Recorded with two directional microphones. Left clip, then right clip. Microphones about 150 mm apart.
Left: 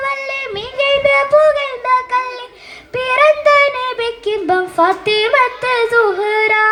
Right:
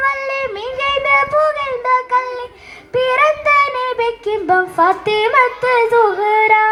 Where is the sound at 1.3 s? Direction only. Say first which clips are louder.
Left 4 dB; 30° left (ahead or behind).